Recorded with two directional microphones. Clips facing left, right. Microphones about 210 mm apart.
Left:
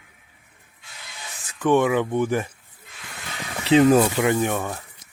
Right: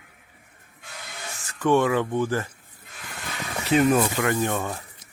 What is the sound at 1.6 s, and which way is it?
Speech, 15° left (ahead or behind).